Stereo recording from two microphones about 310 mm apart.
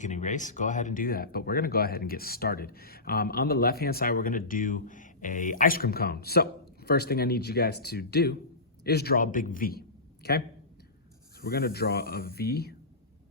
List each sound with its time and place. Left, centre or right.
0.0 s speech: left